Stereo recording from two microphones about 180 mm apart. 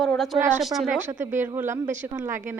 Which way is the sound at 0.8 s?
10° right (ahead or behind).